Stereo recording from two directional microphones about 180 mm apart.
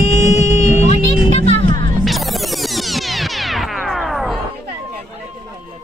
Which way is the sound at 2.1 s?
Centre (ahead or behind).